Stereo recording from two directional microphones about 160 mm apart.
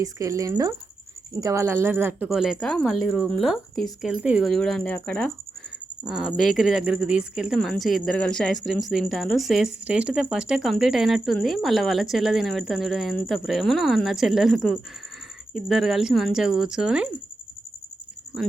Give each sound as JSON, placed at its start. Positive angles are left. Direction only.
{"t": 0.0, "sound": "speech", "side_deg": -20}
{"t": 6.1, "sound": "speech", "side_deg": -5}